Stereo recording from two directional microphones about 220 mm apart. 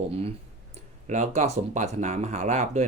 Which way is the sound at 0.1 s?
25° right (ahead or behind).